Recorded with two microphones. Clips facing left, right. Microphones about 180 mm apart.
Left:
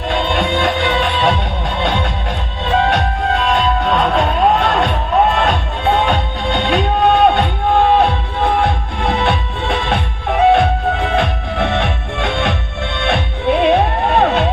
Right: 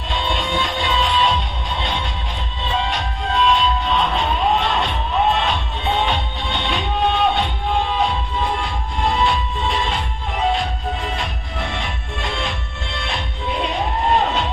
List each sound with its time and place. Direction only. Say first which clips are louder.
0.1 s music: left 6 dB; 55° left (ahead or behind)